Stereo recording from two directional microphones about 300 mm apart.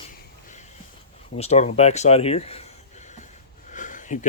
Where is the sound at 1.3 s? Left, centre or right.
Left.